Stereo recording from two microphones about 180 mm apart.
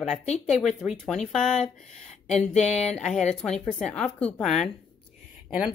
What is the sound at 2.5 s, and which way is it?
Speech, 40° left (ahead or behind).